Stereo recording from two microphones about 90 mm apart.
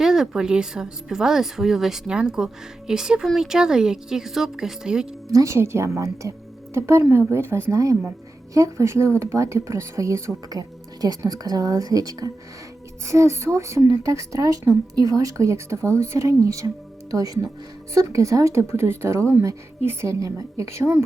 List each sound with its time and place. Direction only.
0.0 s a woman's voice: 5° right (ahead or behind)
5.3 s a woman's voice: 35° right (ahead or behind)
10.6 s speech: 45° right (ahead or behind)
13.1 s a woman's voice: 35° right (ahead or behind)